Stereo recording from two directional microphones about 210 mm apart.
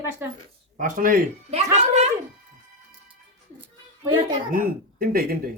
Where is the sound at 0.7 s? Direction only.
40° right (ahead or behind).